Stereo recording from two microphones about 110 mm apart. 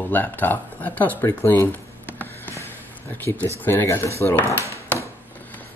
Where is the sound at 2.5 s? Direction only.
25° left (ahead or behind).